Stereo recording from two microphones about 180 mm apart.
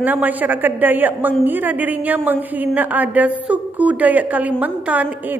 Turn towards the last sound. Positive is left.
turn(degrees=-10)  # may be behind; listen again after turning